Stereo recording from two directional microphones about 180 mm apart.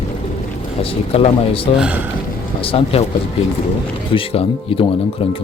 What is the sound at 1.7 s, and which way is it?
Speech, 5° right (ahead or behind).